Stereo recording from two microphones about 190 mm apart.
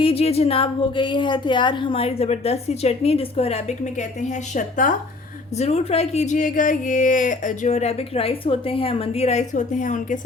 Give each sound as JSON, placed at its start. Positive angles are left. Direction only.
{"t": 0.0, "sound": "a woman's voice", "side_deg": 30}